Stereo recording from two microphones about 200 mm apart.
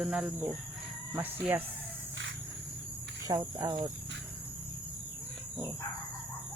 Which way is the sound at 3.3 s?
20° right (ahead or behind).